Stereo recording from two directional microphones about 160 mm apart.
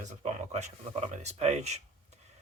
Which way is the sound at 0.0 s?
45° right (ahead or behind).